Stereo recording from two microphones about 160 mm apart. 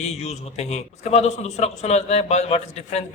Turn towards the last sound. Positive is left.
turn(degrees=45)  # may be behind; listen again after turning